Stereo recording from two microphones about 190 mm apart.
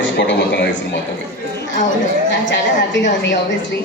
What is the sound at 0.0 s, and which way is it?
Speech, 65° left (ahead or behind).